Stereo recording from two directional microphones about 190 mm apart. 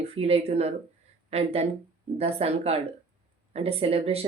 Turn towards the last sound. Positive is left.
turn(degrees=-30)  # may be behind; listen again after turning